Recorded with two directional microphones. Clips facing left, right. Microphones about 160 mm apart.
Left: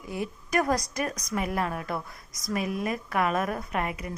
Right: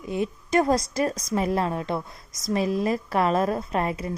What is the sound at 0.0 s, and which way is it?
A woman's voice, 20° right (ahead or behind).